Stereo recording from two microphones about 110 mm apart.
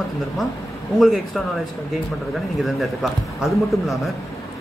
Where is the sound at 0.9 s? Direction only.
Centre (ahead or behind).